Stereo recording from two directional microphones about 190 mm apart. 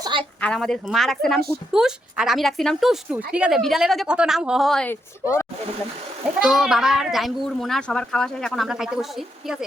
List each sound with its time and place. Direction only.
0.0 s a sound: 25° right (ahead or behind)
0.4 s speech: 5° left (ahead or behind)
5.2 s speech: 15° left (ahead or behind)
6.4 s speech: centre (ahead or behind)